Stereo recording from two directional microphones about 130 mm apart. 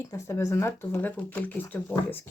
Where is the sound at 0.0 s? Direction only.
20° left (ahead or behind).